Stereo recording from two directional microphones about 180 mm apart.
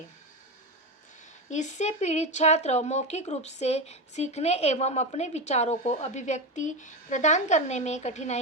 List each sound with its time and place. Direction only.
1.5 s speech: 40° left (ahead or behind)